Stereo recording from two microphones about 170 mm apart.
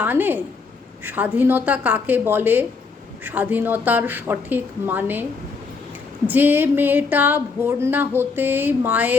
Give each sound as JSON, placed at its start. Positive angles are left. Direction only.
{"t": 0.0, "sound": "speech", "side_deg": -10}
{"t": 6.2, "sound": "speech", "side_deg": -10}